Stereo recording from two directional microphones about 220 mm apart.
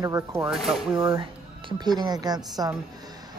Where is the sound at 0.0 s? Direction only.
15° right (ahead or behind).